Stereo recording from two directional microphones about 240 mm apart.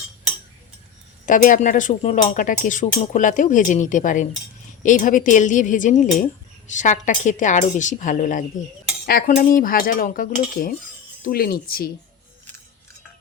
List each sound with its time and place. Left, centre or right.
1.2 s speech: left